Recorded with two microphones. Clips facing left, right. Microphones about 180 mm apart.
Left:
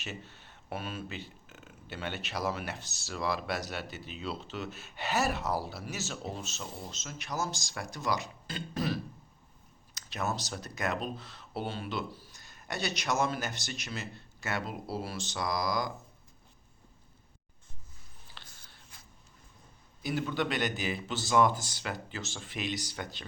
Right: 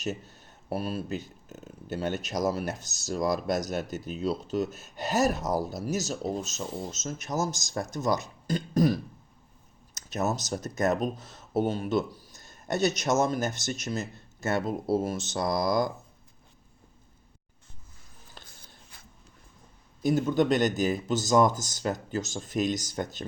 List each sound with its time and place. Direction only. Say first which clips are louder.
0.0 s a man's voice: right 9 dB; 40° right (ahead or behind)
18.4 s a sound: right 3 dB; 45° right (ahead or behind)
20.0 s a man's voice: right 8 dB; 45° right (ahead or behind)